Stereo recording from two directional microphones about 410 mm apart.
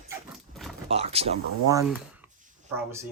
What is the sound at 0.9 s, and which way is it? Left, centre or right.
Speech, centre.